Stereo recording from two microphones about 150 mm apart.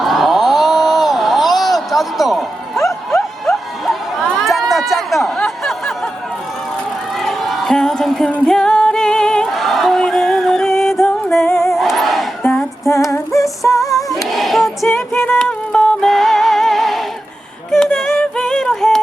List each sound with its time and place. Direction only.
0.0 s a sound: centre (ahead or behind)
7.2 s singing: centre (ahead or behind)
11.0 s music: centre (ahead or behind)
11.4 s music: 15° left (ahead or behind)
11.7 s a sound: centre (ahead or behind)
12.4 s female singing: 5° left (ahead or behind)
12.9 s female singing: 20° left (ahead or behind)
14.3 s music: centre (ahead or behind)